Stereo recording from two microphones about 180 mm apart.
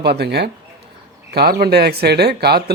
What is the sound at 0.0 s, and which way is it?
Speech, 65° right (ahead or behind).